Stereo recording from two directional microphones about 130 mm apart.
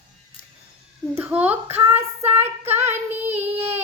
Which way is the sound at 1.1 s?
15° right (ahead or behind).